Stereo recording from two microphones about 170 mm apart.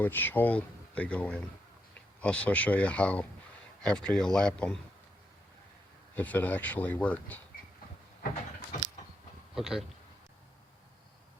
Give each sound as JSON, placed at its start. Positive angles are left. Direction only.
{"t": 0.0, "sound": "speech", "side_deg": 10}
{"t": 6.1, "sound": "speech", "side_deg": 10}
{"t": 9.6, "sound": "speech", "side_deg": -5}